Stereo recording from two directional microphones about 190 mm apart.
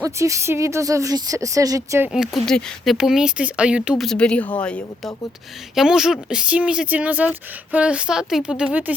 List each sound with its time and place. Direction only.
0.0 s speech: 15° right (ahead or behind)
2.1 s speech: centre (ahead or behind)
5.7 s speech: 5° right (ahead or behind)